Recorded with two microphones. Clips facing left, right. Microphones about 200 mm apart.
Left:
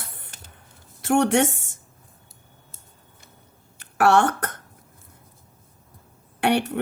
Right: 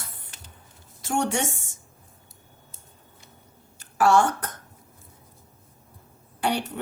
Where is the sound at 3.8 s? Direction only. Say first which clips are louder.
Left 1 dB; 65° left (ahead or behind).